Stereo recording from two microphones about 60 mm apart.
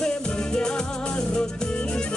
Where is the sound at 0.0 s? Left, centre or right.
Centre.